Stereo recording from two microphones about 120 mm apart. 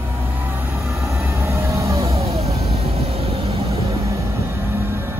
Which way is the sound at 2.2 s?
60° right (ahead or behind).